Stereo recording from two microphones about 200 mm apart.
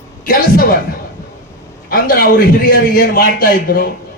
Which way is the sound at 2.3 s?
50° left (ahead or behind).